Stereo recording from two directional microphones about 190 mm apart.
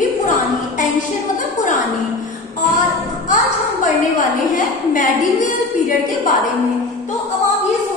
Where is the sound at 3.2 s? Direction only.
45° left (ahead or behind).